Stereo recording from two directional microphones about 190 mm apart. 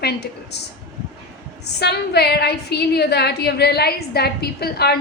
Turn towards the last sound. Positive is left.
turn(degrees=55)  # may be behind; listen again after turning